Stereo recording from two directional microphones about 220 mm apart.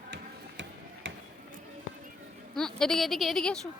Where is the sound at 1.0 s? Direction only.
60° right (ahead or behind).